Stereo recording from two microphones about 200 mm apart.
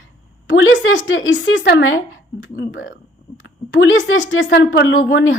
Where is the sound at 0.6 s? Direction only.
75° left (ahead or behind).